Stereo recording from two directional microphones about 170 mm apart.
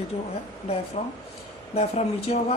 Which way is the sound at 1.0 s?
40° left (ahead or behind).